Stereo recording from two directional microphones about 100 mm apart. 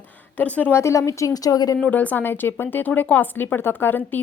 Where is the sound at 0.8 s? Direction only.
30° left (ahead or behind).